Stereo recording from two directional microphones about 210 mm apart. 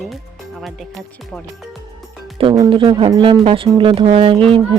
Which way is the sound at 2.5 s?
20° right (ahead or behind).